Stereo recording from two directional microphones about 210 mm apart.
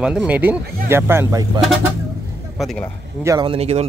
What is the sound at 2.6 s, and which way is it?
Speech, centre (ahead or behind).